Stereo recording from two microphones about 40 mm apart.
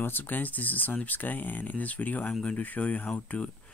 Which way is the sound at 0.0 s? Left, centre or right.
Left.